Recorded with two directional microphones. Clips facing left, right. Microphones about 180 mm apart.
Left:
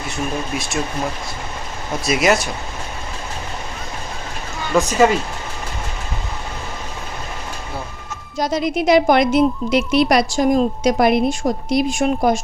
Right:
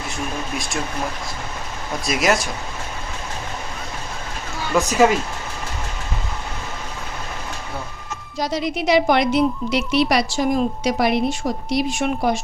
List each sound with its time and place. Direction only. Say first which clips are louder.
0.5 s speech: left 2 dB; centre (ahead or behind)
2.0 s speech: left 3 dB; centre (ahead or behind)
4.7 s speech: left 1 dB; 5° right (ahead or behind)
8.4 s a woman's voice: left 4 dB; 50° left (ahead or behind)